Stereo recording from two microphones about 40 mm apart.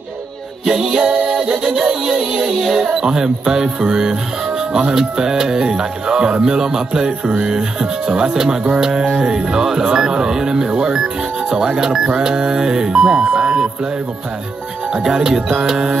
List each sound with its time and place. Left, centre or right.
0.7 s speech: centre
14.9 s speech: centre